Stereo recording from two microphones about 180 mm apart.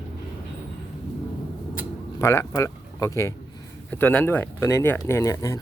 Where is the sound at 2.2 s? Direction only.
15° left (ahead or behind).